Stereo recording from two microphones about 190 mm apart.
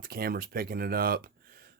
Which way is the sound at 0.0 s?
55° right (ahead or behind).